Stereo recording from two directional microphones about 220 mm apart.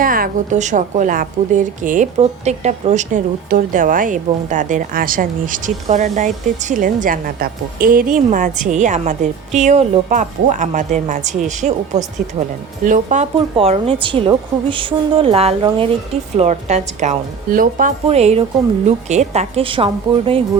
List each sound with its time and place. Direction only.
0.0 s a woman's voice: 40° right (ahead or behind)
12.8 s a woman's voice: 35° right (ahead or behind)